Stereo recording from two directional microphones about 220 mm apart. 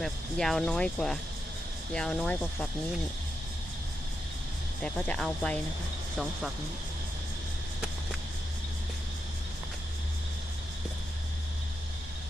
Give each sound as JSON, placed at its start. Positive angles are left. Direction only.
{"t": 0.0, "sound": "speech", "side_deg": 0}
{"t": 4.8, "sound": "speech", "side_deg": 5}